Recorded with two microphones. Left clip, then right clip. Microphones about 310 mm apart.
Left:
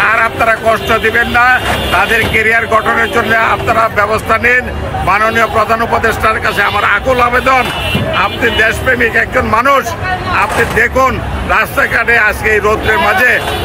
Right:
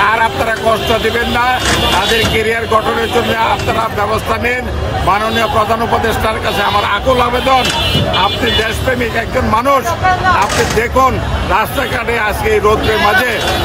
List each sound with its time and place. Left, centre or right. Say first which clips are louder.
0.0 s a man's voice: left 2 dB; centre
5.1 s a man's voice: left 4 dB; centre